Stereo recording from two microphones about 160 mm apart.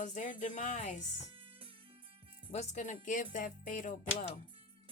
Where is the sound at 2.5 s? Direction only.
50° left (ahead or behind).